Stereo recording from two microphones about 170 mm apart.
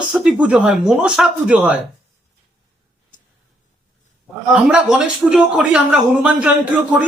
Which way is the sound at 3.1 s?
50° left (ahead or behind).